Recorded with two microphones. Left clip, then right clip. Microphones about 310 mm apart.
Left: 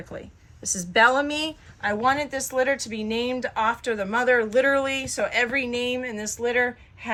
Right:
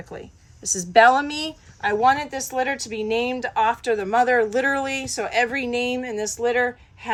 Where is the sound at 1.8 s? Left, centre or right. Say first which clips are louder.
Right 4 dB; right.